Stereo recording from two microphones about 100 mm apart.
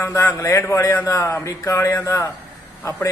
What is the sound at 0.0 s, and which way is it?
A man's voice, 25° left (ahead or behind).